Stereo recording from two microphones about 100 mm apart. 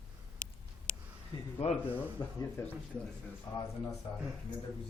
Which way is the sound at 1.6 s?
90° left.